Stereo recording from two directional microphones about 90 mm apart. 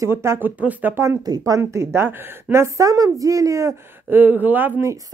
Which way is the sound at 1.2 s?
45° right (ahead or behind).